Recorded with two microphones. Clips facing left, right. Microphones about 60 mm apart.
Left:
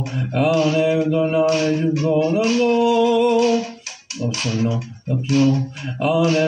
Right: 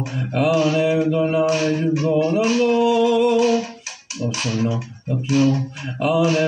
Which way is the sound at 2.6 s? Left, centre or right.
Centre.